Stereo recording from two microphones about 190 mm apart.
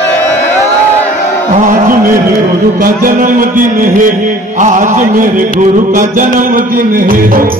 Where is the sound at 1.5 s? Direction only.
45° right (ahead or behind).